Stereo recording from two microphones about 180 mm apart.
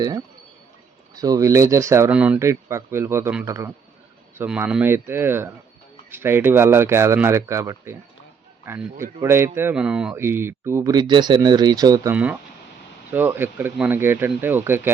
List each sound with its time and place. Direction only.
1.1 s speech: 20° right (ahead or behind)
12.1 s speech: 10° right (ahead or behind)